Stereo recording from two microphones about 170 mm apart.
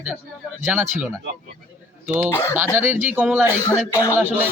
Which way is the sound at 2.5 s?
15° right (ahead or behind).